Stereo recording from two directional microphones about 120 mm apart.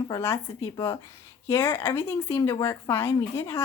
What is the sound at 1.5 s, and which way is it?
Speech, 20° left (ahead or behind).